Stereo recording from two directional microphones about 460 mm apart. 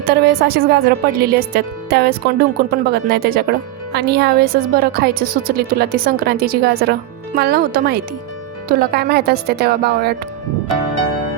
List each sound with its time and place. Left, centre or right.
0.0 s a woman's voice: centre